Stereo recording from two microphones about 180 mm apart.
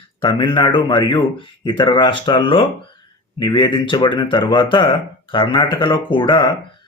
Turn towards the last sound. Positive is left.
turn(degrees=25)  # may be behind; listen again after turning